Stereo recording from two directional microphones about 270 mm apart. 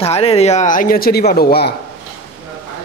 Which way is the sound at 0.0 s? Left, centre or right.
Left.